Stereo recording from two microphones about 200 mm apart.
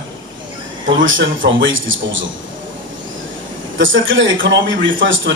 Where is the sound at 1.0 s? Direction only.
70° right (ahead or behind).